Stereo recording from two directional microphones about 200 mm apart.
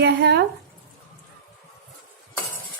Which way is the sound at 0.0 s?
55° right (ahead or behind).